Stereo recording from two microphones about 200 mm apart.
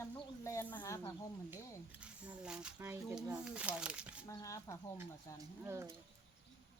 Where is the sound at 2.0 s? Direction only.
5° right (ahead or behind).